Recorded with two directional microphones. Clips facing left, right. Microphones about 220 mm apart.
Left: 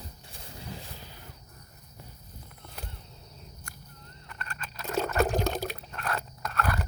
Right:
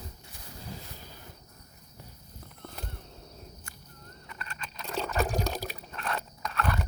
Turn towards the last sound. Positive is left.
turn(degrees=5)  # may be behind; listen again after turning